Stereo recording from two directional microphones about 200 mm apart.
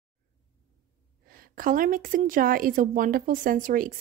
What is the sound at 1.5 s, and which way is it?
Speech, 45° right (ahead or behind).